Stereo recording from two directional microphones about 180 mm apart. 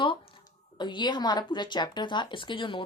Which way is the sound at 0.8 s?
25° left (ahead or behind).